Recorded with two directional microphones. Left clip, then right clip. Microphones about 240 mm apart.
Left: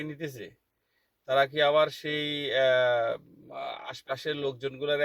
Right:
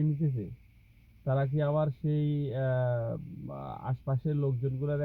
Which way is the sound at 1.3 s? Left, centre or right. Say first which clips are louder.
Left 8 dB; left.